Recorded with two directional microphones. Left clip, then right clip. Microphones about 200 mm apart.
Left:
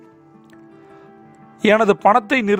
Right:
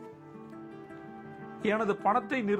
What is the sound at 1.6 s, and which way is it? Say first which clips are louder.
Speech: left 15 dB; 55° left (ahead or behind).